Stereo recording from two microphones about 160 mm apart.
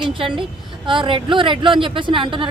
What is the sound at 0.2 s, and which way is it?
Speech, 30° right (ahead or behind).